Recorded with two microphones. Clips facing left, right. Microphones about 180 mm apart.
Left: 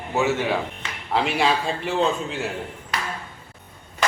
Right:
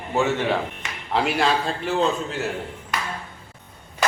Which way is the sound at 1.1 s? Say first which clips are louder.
Even; centre (ahead or behind).